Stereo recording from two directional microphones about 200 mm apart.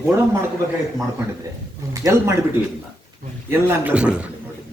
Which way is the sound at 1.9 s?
15° right (ahead or behind).